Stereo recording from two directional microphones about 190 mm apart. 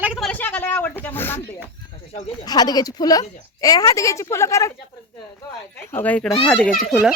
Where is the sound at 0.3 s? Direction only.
10° left (ahead or behind).